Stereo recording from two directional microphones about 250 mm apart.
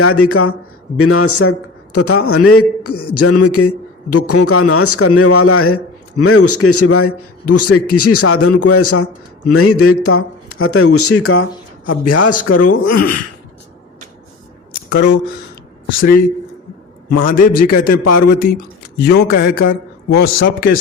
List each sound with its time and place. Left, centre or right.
0.0 s a man's voice: left
11.9 s a man's voice: left
14.8 s a man's voice: left
17.1 s speech: left
17.3 s a man's voice: left